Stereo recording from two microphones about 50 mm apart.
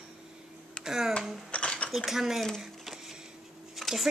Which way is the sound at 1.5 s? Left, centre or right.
Left.